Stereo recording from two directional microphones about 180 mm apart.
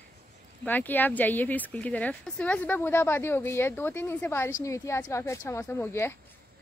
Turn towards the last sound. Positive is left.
turn(degrees=15)  # may be behind; listen again after turning